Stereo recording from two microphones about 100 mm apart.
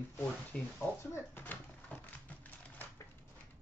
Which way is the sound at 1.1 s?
20° left (ahead or behind).